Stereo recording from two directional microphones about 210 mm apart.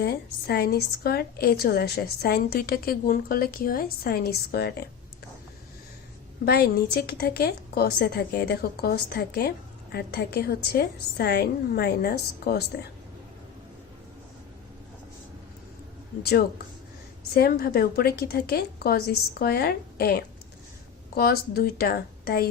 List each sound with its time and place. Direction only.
0.0 s a woman's voice: 50° left (ahead or behind)
6.4 s a woman's voice: 50° left (ahead or behind)
17.3 s a woman's voice: 45° left (ahead or behind)